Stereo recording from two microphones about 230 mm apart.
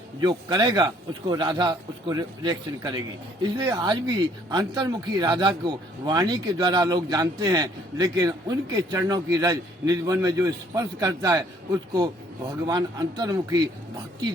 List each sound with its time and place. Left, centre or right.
0.2 s speech: centre